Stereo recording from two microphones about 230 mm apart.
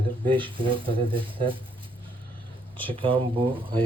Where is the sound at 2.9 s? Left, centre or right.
Right.